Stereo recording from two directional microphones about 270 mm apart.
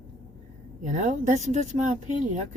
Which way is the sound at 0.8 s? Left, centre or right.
Right.